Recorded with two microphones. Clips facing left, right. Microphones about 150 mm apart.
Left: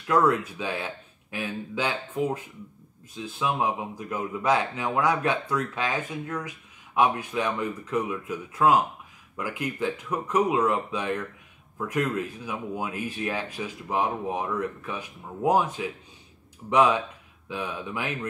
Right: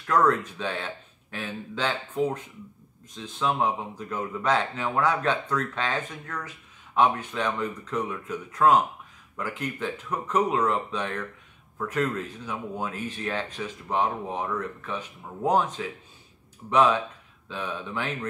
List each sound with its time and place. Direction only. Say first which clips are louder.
0.0 s speech: even; 10° left (ahead or behind)